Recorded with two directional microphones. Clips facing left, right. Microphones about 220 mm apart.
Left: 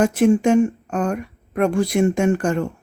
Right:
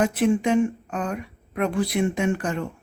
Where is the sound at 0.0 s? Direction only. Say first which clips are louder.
Left 5 dB; 45° left (ahead or behind).